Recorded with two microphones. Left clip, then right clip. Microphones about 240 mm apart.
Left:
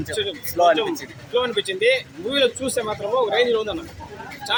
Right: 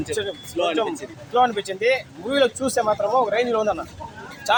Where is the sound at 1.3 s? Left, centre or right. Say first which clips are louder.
Right 2 dB; right.